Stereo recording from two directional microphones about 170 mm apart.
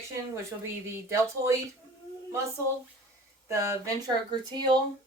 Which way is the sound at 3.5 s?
15° right (ahead or behind).